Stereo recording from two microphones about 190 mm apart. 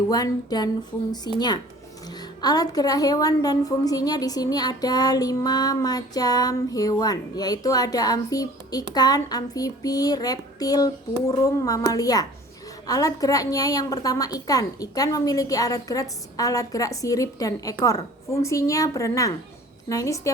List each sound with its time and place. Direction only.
0.1 s a woman's voice: 20° left (ahead or behind)
1.3 s speech: 60° left (ahead or behind)
2.1 s a woman's voice: 20° left (ahead or behind)